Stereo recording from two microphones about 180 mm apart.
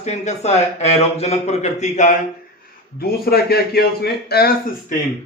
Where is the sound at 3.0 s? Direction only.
60° left (ahead or behind).